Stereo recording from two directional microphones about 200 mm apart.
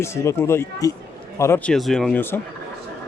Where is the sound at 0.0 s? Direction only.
15° left (ahead or behind).